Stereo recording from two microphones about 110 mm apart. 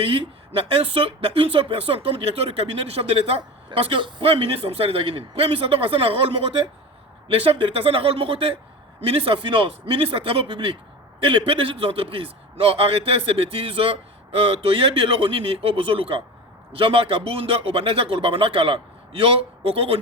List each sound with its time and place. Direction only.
0.0 s speech: 50° right (ahead or behind)